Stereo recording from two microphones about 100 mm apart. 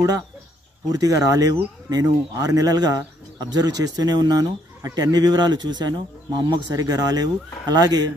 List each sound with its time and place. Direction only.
0.9 s speech: 35° right (ahead or behind)